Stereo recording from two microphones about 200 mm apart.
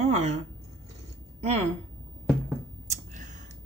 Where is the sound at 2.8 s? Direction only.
40° right (ahead or behind).